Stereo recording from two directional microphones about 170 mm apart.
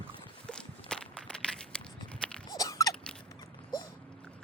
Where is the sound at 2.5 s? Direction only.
20° left (ahead or behind).